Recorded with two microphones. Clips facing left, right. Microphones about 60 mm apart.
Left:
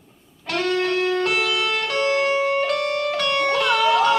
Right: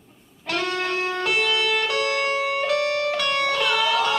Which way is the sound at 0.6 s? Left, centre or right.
Right.